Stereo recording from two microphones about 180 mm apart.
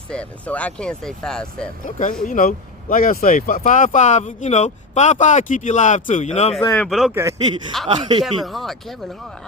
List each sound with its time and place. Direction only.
0.1 s speech: 5° left (ahead or behind)
1.8 s speech: 45° left (ahead or behind)
6.7 s speech: centre (ahead or behind)
7.1 s speech: 15° right (ahead or behind)
8.2 s speech: centre (ahead or behind)